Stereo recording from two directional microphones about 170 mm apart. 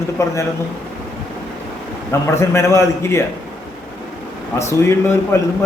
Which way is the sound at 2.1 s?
15° left (ahead or behind).